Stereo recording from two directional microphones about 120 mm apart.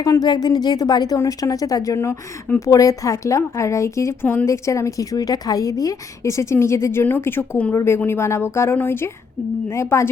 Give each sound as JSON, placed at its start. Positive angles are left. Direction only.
{"t": 0.0, "sound": "a woman's voice", "side_deg": 30}